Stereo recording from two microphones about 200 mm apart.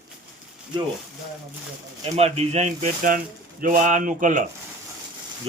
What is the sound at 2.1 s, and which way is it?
Speech, 30° right (ahead or behind).